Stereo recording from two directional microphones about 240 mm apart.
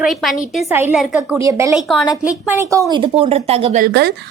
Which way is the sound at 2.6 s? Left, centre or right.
Centre.